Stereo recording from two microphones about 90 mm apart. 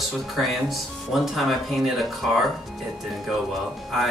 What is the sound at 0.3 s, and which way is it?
Speech, centre (ahead or behind).